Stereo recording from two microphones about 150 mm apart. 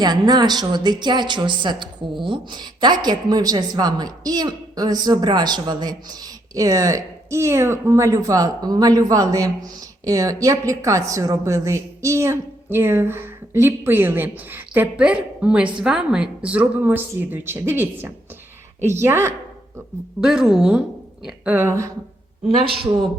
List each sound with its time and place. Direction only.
0.0 s a woman's voice: 25° right (ahead or behind)
20.2 s a woman's voice: 5° right (ahead or behind)